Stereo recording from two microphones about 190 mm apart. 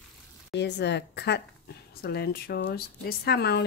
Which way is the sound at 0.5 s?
65° left (ahead or behind).